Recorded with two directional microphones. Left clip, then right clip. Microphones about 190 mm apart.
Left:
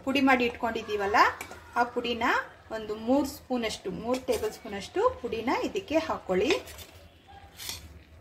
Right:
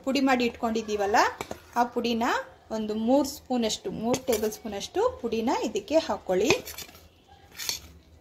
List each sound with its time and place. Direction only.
0.0 s speech: 35° right (ahead or behind)